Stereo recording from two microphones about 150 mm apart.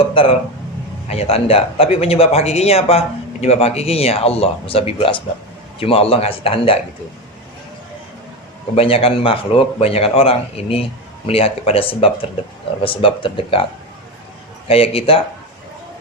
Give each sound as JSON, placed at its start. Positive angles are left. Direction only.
{"t": 0.1, "sound": "a man's voice", "side_deg": 35}
{"t": 8.7, "sound": "a man's voice", "side_deg": 40}
{"t": 14.7, "sound": "a man's voice", "side_deg": 40}